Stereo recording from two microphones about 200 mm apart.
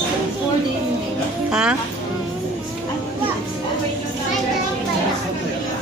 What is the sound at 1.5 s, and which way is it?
Music, 5° right (ahead or behind).